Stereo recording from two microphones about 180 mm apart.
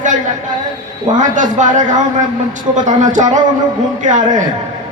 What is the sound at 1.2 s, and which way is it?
A man's voice, 45° right (ahead or behind).